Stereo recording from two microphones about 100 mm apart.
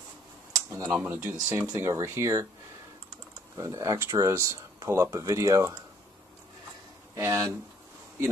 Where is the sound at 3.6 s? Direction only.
35° right (ahead or behind).